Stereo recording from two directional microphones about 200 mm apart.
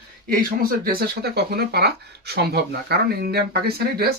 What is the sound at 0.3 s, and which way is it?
Speech, 45° right (ahead or behind).